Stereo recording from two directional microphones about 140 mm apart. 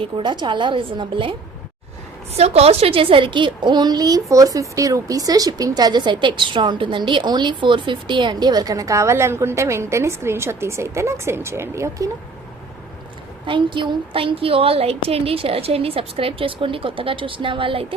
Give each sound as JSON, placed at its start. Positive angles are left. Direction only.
{"t": 0.0, "sound": "a woman's voice", "side_deg": -35}
{"t": 2.3, "sound": "a woman's voice", "side_deg": -50}
{"t": 13.4, "sound": "a woman's voice", "side_deg": -35}